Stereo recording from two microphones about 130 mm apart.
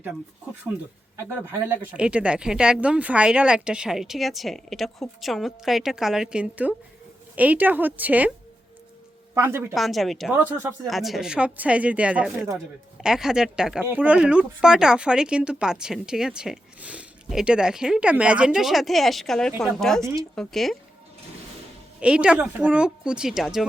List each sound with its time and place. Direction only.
1.1 s a woman's voice: 15° right (ahead or behind)
9.3 s speech: 20° right (ahead or behind)
9.7 s speech: centre (ahead or behind)
10.3 s a woman's voice: 15° right (ahead or behind)
10.8 s a woman's voice: centre (ahead or behind)
22.0 s a woman's voice: 10° right (ahead or behind)